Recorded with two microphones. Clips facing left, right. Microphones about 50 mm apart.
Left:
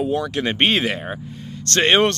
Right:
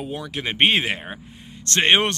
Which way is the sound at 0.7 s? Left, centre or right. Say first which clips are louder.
Left 1 dB; right.